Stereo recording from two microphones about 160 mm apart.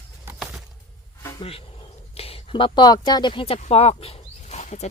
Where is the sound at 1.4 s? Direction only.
35° left (ahead or behind).